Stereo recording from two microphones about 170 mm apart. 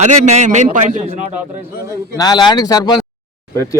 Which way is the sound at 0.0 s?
45° right (ahead or behind).